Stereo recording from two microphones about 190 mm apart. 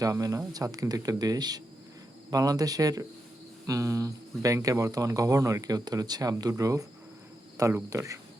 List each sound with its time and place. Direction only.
0.0 s speech: 20° right (ahead or behind)